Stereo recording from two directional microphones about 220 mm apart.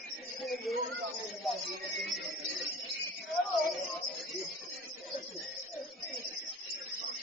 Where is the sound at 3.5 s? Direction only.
Centre (ahead or behind).